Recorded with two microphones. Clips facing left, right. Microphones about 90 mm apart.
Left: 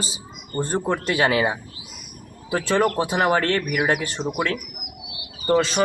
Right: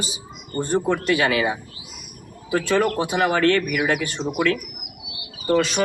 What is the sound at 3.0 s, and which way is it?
Speech, 30° left (ahead or behind).